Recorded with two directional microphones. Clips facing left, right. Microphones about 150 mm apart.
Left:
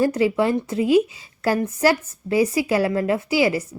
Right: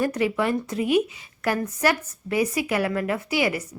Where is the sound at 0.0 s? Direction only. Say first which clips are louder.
Left 4 dB; 30° left (ahead or behind).